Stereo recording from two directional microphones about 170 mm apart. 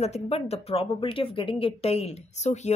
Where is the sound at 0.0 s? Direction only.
40° left (ahead or behind).